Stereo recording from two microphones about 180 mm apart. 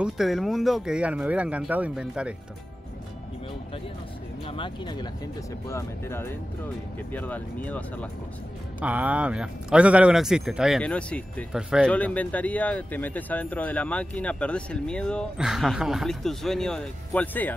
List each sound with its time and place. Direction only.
0.0 s speech: centre (ahead or behind)
4.5 s speech: 25° left (ahead or behind); by 8.1 s 10° left (ahead or behind)
8.7 s speech: 10° right (ahead or behind)
11.9 s speech: 10° left (ahead or behind)